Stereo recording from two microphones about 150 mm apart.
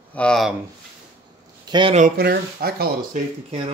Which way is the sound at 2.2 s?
90° right.